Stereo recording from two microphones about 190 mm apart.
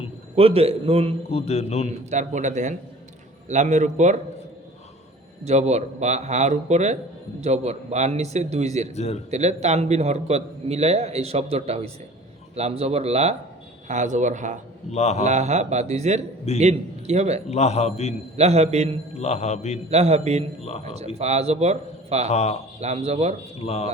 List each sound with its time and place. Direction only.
0.3 s a man's voice: 30° right (ahead or behind)
1.3 s a man's voice: 30° left (ahead or behind)
2.0 s a man's voice: 40° right (ahead or behind)
5.5 s a man's voice: 35° right (ahead or behind)
14.8 s a man's voice: 35° left (ahead or behind)
15.2 s a man's voice: 35° right (ahead or behind)
17.5 s a man's voice: 35° left (ahead or behind)
18.3 s a man's voice: 35° right (ahead or behind)
19.2 s a man's voice: 35° left (ahead or behind)
19.9 s a man's voice: 35° right (ahead or behind)
22.3 s a man's voice: 35° left (ahead or behind)
22.8 s a man's voice: 35° right (ahead or behind)